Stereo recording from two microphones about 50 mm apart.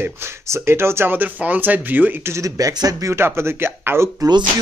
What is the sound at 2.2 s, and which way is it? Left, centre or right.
Speech, right.